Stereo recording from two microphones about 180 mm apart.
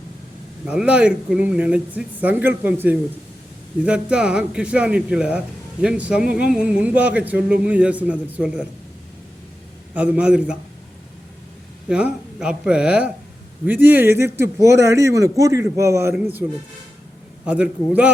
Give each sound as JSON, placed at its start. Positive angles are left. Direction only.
{"t": 0.7, "sound": "a man's voice", "side_deg": -5}
{"t": 9.9, "sound": "speech", "side_deg": -10}
{"t": 11.9, "sound": "a man's voice", "side_deg": -5}